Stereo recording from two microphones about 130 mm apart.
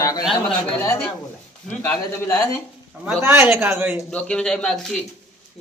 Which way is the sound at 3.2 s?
20° right (ahead or behind).